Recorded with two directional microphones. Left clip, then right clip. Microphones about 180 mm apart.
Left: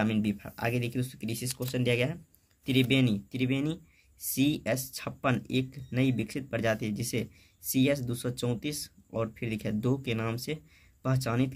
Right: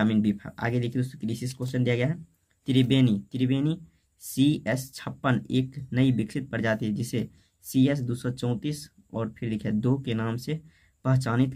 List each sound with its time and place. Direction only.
0.0 s speech: centre (ahead or behind)